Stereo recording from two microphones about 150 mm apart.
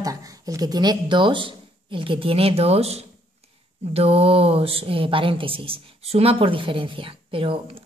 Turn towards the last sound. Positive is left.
turn(degrees=-35)  # may be behind; listen again after turning